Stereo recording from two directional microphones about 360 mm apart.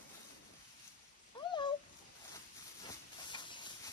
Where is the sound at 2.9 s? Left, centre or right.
Centre.